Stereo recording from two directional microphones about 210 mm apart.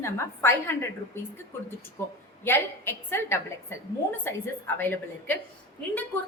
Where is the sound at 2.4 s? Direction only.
10° left (ahead or behind).